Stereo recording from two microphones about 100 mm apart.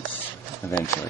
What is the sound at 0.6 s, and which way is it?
Speech, 25° left (ahead or behind).